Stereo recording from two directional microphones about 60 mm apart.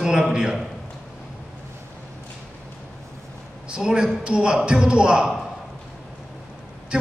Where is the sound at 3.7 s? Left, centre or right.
Centre.